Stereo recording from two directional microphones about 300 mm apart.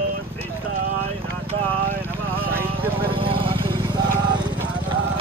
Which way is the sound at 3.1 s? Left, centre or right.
Centre.